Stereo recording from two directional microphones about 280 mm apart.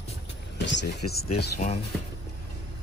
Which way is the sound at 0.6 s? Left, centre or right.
Left.